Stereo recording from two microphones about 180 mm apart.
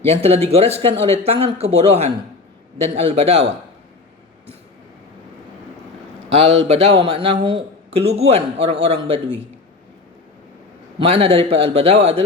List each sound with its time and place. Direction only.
0.1 s a man's voice: 35° right (ahead or behind)
6.3 s a man's voice: 35° right (ahead or behind)
10.9 s a man's voice: 35° right (ahead or behind)